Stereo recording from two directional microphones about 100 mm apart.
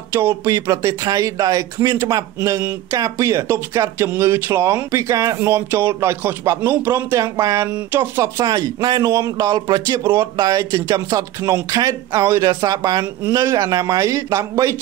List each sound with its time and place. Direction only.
0.5 s speech: 35° right (ahead or behind)
5.4 s speech: 25° right (ahead or behind)
8.5 s speech: 45° right (ahead or behind)